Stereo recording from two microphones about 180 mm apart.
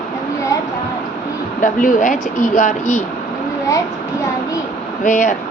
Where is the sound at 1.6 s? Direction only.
45° left (ahead or behind).